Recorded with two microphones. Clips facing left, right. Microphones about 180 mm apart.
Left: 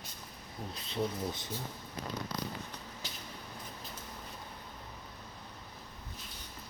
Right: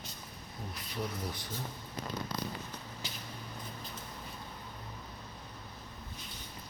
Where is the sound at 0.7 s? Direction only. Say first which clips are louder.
Left 4 dB; 25° left (ahead or behind).